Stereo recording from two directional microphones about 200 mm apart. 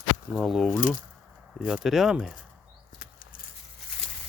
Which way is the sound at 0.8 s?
40° left (ahead or behind).